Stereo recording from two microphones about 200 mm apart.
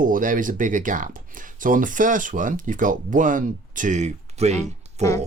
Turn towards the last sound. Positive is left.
turn(degrees=-35)  # may be behind; listen again after turning